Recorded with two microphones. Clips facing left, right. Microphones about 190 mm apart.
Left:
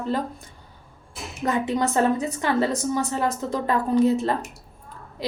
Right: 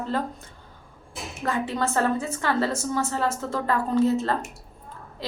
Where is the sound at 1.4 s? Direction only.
20° left (ahead or behind).